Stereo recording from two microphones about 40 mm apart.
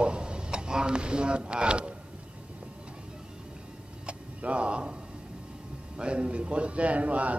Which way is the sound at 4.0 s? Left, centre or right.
Right.